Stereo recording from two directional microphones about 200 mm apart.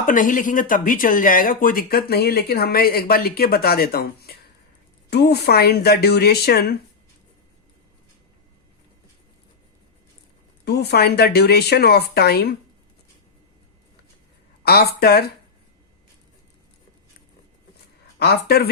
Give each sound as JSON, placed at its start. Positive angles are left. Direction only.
{"t": 0.0, "sound": "speech", "side_deg": 40}
{"t": 10.7, "sound": "speech", "side_deg": 55}
{"t": 14.6, "sound": "speech", "side_deg": 50}
{"t": 18.2, "sound": "speech", "side_deg": 50}